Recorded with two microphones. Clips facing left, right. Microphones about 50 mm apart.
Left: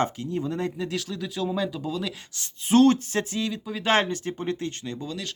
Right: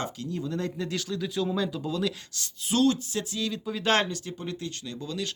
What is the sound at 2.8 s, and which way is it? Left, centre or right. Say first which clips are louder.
Speech: left 5 dB; left.